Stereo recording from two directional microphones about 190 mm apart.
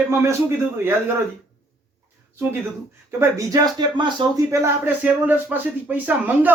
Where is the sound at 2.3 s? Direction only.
10° right (ahead or behind).